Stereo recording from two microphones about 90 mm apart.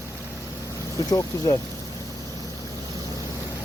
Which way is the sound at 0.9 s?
40° left (ahead or behind).